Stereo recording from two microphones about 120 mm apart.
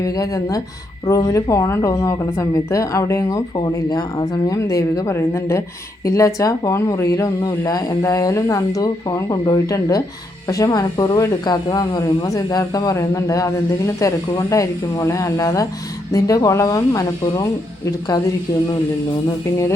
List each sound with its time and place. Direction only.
0.0 s speech: 30° left (ahead or behind)